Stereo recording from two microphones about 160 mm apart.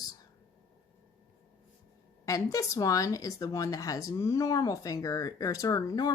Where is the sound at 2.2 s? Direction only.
20° left (ahead or behind).